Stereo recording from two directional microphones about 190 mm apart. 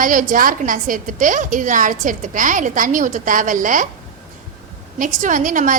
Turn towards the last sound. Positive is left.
turn(degrees=-45)  # may be behind; listen again after turning